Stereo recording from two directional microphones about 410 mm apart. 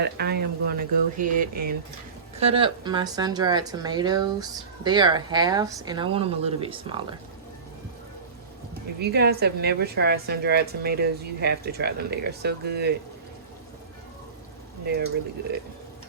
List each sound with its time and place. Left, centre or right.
0.0 s a woman's voice: right
9.0 s a woman's voice: right
14.8 s a woman's voice: right